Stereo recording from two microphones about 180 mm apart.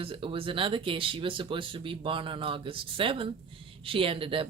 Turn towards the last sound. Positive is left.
turn(degrees=-30)  # may be behind; listen again after turning